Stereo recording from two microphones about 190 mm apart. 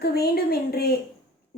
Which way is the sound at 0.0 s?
55° left (ahead or behind).